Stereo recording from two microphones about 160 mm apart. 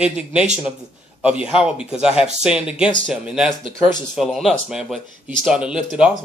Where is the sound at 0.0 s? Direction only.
5° right (ahead or behind).